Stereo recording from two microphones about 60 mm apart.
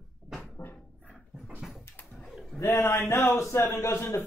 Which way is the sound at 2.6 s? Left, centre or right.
Left.